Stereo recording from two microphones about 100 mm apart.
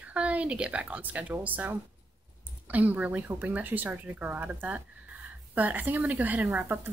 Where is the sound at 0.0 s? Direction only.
15° right (ahead or behind).